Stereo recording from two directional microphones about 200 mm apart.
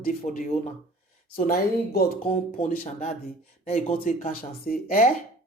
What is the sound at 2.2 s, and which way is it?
Speech, 35° left (ahead or behind).